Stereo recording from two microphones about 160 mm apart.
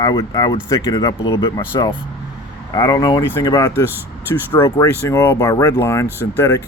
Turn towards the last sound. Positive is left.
turn(degrees=15)  # may be behind; listen again after turning